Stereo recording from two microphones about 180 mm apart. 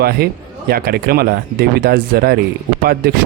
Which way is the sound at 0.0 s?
60° right (ahead or behind).